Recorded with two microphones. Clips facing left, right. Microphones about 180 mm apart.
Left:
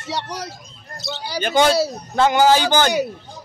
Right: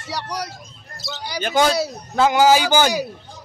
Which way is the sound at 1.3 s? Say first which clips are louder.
Left 2 dB; centre (ahead or behind).